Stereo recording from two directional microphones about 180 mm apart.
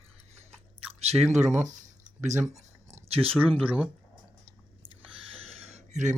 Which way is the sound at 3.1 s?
30° right (ahead or behind).